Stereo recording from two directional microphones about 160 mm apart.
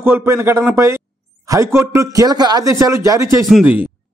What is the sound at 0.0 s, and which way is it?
Speech, 15° right (ahead or behind).